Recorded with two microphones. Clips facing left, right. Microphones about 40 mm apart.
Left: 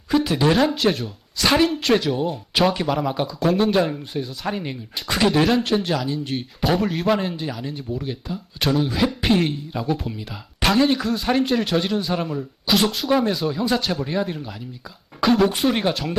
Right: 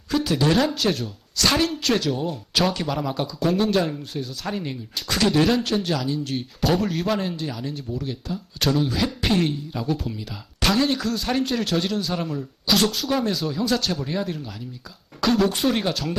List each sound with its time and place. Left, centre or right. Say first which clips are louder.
0.1 s speech: left 2 dB; centre